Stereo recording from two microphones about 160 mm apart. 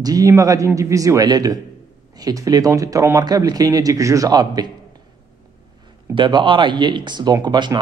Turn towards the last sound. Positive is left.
turn(degrees=-25)  # may be behind; listen again after turning